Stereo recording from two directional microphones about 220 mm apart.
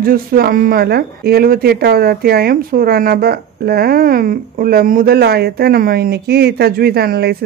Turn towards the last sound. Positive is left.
turn(degrees=-45)  # may be behind; listen again after turning